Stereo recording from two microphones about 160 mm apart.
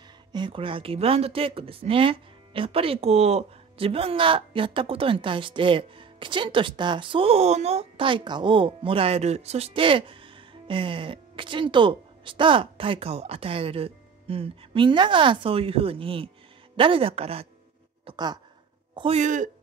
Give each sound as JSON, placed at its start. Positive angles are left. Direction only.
{"t": 0.3, "sound": "speech", "side_deg": -30}
{"t": 18.0, "sound": "speech", "side_deg": -25}
{"t": 18.9, "sound": "a man's voice", "side_deg": -40}